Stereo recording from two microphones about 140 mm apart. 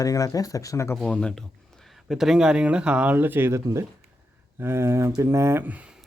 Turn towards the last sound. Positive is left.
turn(degrees=-10)  # may be behind; listen again after turning